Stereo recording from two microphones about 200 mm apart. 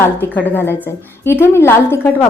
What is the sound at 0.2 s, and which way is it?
A woman's voice, 10° left (ahead or behind).